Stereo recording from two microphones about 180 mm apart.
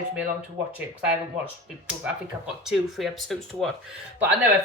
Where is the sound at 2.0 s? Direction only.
5° right (ahead or behind).